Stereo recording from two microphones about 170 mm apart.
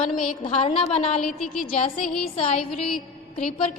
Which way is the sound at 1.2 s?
Centre (ahead or behind).